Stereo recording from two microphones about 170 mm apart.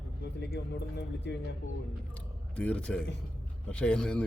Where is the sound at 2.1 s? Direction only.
5° left (ahead or behind).